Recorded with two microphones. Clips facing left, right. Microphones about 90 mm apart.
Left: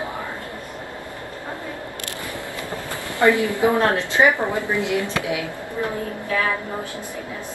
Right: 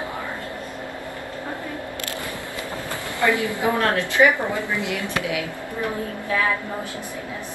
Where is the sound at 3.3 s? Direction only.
20° right (ahead or behind).